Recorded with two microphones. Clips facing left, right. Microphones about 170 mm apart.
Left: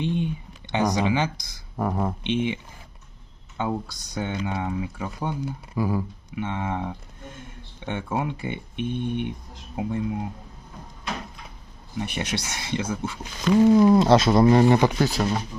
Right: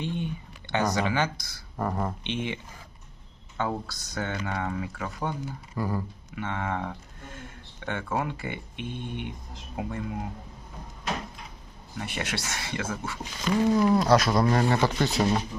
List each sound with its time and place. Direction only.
0.0 s a sound: 20° left (ahead or behind)
0.7 s speech: 15° left (ahead or behind)
3.6 s speech: 15° left (ahead or behind)
11.9 s speech: 20° left (ahead or behind)
14.9 s speech: centre (ahead or behind)